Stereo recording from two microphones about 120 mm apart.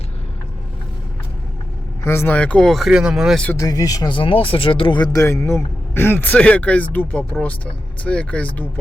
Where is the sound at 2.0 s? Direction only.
20° left (ahead or behind); by 3.4 s 5° right (ahead or behind).